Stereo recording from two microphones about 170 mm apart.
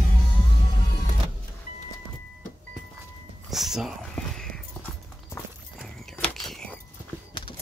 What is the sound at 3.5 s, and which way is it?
Whispering, centre (ahead or behind).